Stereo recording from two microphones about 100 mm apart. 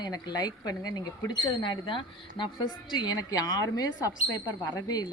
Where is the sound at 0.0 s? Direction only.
40° left (ahead or behind).